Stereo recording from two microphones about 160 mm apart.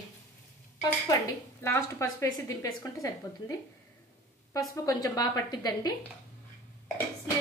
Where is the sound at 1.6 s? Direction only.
20° left (ahead or behind).